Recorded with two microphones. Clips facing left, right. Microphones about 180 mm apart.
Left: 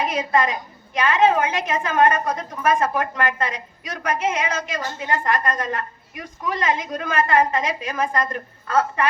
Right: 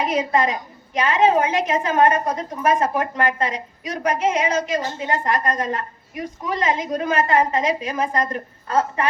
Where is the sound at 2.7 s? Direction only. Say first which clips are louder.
Right 1 dB; 20° right (ahead or behind).